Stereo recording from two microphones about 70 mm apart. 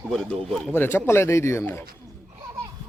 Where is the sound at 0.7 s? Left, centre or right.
Left.